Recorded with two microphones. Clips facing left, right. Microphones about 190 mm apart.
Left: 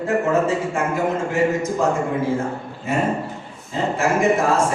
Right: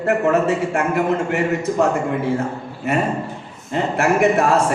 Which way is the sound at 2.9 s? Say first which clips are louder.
Right 1 dB; 65° right (ahead or behind).